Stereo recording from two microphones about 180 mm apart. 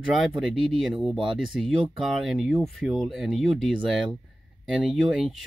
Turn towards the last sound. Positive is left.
turn(degrees=0)  # may be behind; listen again after turning